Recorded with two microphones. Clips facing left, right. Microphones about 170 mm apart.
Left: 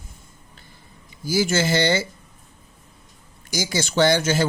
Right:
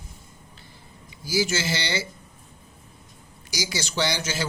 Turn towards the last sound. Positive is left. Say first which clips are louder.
# left 8 dB
turn(degrees=50)  # may be behind; listen again after turning